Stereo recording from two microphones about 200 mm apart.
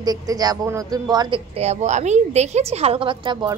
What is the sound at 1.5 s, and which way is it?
A woman's voice, 35° right (ahead or behind).